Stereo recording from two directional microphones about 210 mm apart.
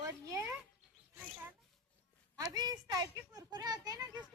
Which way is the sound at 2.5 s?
20° right (ahead or behind).